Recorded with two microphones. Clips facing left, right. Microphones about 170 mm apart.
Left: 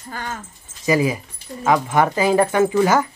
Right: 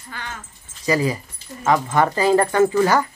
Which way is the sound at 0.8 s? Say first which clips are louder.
Left 2 dB; 15° left (ahead or behind).